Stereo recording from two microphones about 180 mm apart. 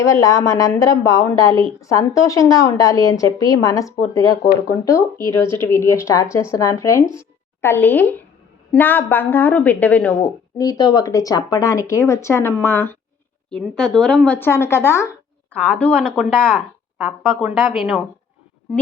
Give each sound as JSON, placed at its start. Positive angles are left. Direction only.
{"t": 0.0, "sound": "a woman's voice", "side_deg": 20}
{"t": 17.0, "sound": "speech", "side_deg": -5}